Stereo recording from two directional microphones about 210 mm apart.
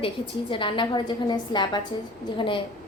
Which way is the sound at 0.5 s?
25° left (ahead or behind).